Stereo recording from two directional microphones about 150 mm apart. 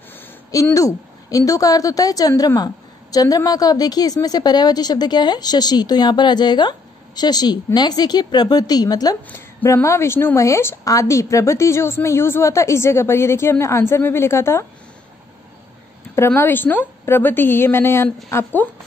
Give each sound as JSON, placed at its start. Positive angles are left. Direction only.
{"t": 0.1, "sound": "speech", "side_deg": 20}
{"t": 16.2, "sound": "a woman's voice", "side_deg": 15}